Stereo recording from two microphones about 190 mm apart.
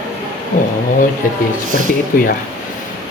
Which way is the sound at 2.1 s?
45° left (ahead or behind).